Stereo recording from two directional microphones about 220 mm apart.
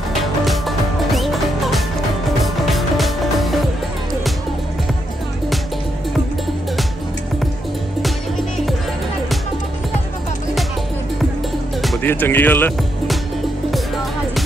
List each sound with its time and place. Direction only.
0.2 s music: centre (ahead or behind)
11.8 s music: 5° left (ahead or behind)